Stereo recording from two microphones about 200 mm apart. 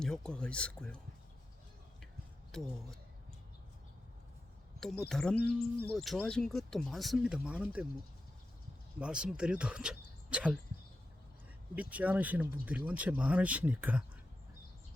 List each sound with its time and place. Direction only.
0.0 s speech: 5° left (ahead or behind)
2.5 s speech: centre (ahead or behind)
4.8 s speech: centre (ahead or behind)
9.0 s speech: 5° right (ahead or behind)
11.7 s speech: 5° right (ahead or behind)